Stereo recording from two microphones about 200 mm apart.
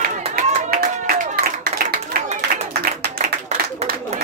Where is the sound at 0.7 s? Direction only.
45° right (ahead or behind).